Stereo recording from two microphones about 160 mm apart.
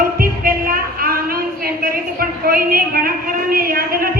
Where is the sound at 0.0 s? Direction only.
65° right (ahead or behind).